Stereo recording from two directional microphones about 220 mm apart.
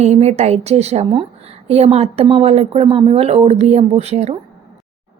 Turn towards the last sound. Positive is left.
turn(degrees=-30)  # may be behind; listen again after turning